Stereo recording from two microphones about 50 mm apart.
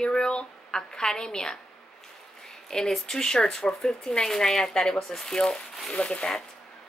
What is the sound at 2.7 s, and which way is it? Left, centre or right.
Speech, centre.